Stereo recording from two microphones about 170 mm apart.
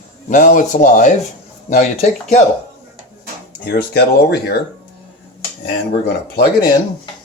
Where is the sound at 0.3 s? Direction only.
50° left (ahead or behind).